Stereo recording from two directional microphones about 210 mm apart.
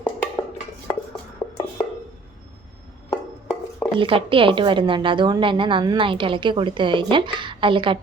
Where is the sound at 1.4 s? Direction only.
15° left (ahead or behind).